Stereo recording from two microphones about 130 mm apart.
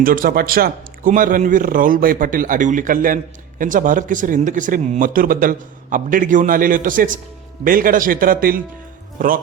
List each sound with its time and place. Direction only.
0.0 s speech: 90° right